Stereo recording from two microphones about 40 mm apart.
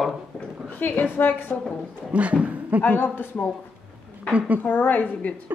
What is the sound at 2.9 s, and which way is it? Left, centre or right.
Speech, left.